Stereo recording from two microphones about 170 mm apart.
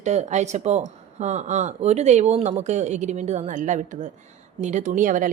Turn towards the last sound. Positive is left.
turn(degrees=-50)  # may be behind; listen again after turning